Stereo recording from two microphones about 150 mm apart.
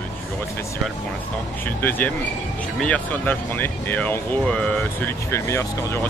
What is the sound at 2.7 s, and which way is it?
Speech, 10° left (ahead or behind).